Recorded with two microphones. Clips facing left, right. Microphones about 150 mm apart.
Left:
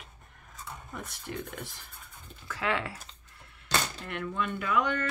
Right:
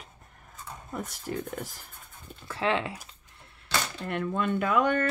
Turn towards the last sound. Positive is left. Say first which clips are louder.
# right 4 dB
turn(degrees=-50)  # may be behind; listen again after turning